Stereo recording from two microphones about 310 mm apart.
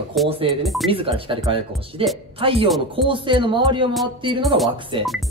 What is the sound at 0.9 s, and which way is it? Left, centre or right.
Speech, centre.